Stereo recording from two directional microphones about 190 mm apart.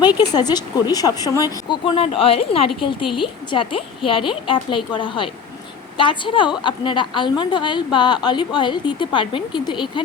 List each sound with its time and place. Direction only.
0.0 s a woman's voice: 20° left (ahead or behind)
2.0 s a woman's voice: 30° left (ahead or behind)